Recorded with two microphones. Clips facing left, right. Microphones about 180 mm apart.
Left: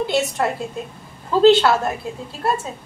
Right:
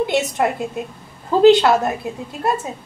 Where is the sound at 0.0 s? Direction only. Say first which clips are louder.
Right 2 dB; 20° right (ahead or behind).